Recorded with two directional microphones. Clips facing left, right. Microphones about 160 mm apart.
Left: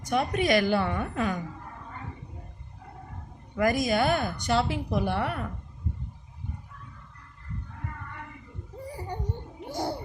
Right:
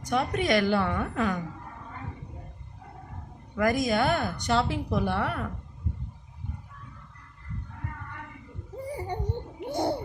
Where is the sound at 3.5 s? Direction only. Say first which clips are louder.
Even; 10° left (ahead or behind).